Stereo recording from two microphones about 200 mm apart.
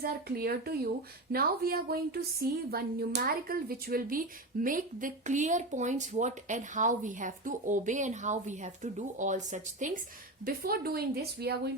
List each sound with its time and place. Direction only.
0.0 s a woman's voice: 50° right (ahead or behind)